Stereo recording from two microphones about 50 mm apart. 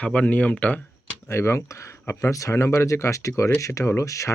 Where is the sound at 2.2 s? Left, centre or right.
Left.